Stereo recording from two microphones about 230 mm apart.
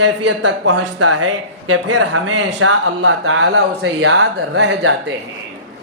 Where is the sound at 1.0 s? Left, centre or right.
Right.